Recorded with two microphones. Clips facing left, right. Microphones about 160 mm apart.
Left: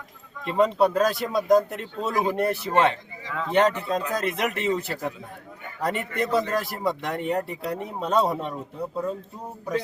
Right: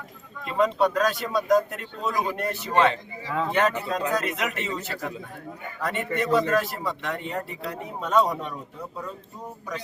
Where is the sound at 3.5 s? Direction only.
30° left (ahead or behind).